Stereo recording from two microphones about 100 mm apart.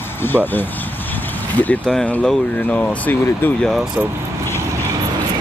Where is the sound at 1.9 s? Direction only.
10° left (ahead or behind).